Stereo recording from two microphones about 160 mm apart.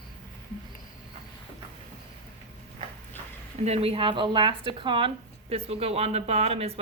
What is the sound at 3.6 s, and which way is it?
Speech, 40° right (ahead or behind).